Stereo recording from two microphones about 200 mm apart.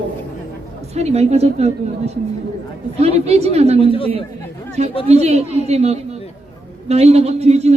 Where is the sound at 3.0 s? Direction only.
30° right (ahead or behind).